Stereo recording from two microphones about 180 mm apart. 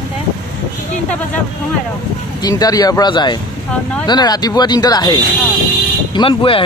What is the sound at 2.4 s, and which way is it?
Speech, 20° left (ahead or behind).